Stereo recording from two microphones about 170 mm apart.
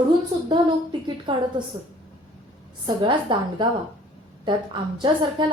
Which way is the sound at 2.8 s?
25° right (ahead or behind).